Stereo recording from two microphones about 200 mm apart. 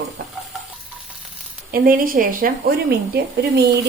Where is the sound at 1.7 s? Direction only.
45° right (ahead or behind).